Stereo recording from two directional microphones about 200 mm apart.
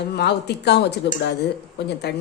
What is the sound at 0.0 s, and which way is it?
Speech, 55° left (ahead or behind).